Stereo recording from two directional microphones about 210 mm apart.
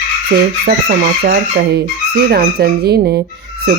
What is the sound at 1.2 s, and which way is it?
Speech, 45° right (ahead or behind).